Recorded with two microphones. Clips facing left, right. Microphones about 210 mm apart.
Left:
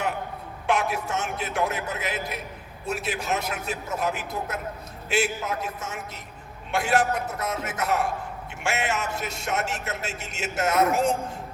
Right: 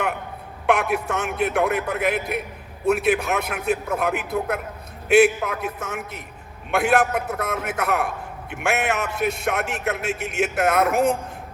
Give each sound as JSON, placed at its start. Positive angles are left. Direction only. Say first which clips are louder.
{"t": 0.7, "sound": "a man's voice", "louder": "right 4 dB", "side_deg": -60}